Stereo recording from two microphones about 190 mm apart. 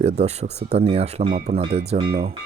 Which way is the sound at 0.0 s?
35° right (ahead or behind).